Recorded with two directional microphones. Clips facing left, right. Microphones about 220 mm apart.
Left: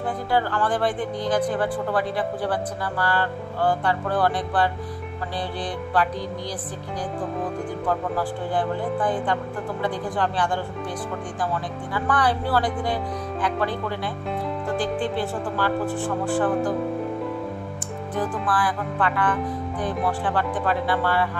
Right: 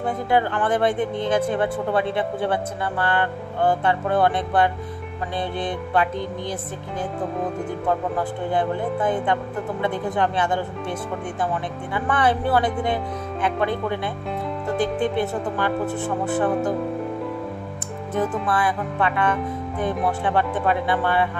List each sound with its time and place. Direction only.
0.0 s speech: 20° right (ahead or behind)
5.9 s speech: 25° right (ahead or behind)
7.8 s speech: 20° right (ahead or behind)
15.1 s speech: 20° right (ahead or behind)
18.2 s speech: centre (ahead or behind)
18.5 s speech: 25° right (ahead or behind)